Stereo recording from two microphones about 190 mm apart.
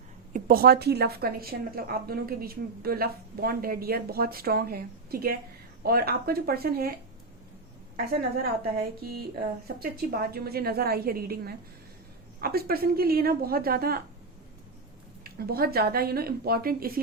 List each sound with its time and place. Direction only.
0.3 s a woman's voice: 50° right (ahead or behind)
8.4 s a woman's voice: 55° right (ahead or behind)
15.2 s a woman's voice: 55° right (ahead or behind)